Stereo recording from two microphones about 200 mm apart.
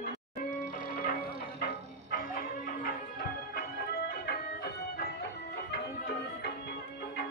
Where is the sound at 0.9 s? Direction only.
45° left (ahead or behind).